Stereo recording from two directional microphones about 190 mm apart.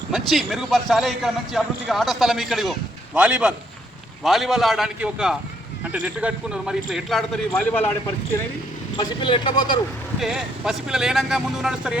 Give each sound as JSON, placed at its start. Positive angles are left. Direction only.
{"t": 0.1, "sound": "a man's voice", "side_deg": 0}
{"t": 9.0, "sound": "speech", "side_deg": 25}
{"t": 10.2, "sound": "a man's voice", "side_deg": 0}